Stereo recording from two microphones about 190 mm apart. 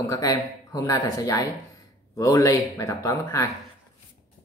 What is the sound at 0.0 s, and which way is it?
Speech, 20° left (ahead or behind).